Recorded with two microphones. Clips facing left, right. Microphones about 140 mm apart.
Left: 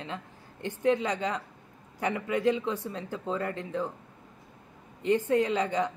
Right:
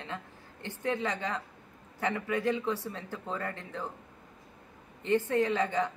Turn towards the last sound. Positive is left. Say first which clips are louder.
# left 1 dB
turn(degrees=20)  # may be behind; listen again after turning